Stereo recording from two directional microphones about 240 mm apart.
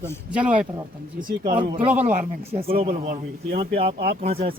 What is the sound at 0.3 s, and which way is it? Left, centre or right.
Speech, centre.